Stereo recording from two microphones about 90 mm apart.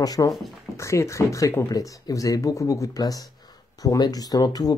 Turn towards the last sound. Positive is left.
turn(degrees=45)  # may be behind; listen again after turning